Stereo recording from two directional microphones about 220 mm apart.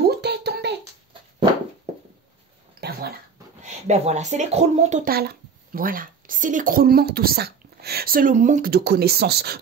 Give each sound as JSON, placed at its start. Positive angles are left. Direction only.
{"t": 0.2, "sound": "a sound", "side_deg": -50}
{"t": 2.8, "sound": "cough", "side_deg": -45}
{"t": 3.6, "sound": "speech", "side_deg": -30}
{"t": 5.1, "sound": "speech", "side_deg": -40}